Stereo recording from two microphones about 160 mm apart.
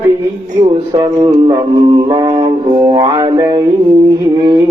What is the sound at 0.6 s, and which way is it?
Mantra, 25° right (ahead or behind).